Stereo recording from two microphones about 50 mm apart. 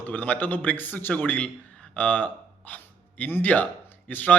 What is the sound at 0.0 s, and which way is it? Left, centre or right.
A man's voice, left.